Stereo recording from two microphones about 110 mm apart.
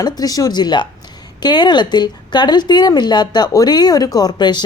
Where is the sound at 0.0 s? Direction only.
35° left (ahead or behind).